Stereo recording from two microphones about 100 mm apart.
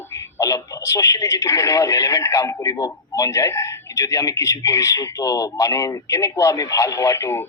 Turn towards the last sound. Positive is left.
turn(degrees=25)  # may be behind; listen again after turning